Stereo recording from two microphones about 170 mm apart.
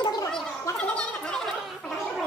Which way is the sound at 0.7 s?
5° left (ahead or behind).